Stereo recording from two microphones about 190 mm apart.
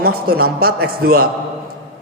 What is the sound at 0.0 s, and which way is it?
A man's voice, 55° right (ahead or behind).